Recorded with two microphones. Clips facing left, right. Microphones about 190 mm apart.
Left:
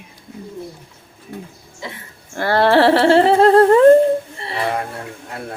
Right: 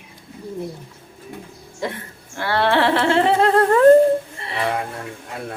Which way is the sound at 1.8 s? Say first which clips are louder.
Right 6 dB; 55° right (ahead or behind).